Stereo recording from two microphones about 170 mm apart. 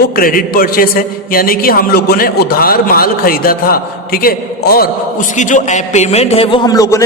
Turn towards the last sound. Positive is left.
turn(degrees=20)  # may be behind; listen again after turning